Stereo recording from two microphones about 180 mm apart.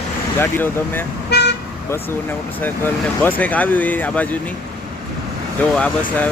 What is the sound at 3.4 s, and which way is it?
Speech, 10° left (ahead or behind).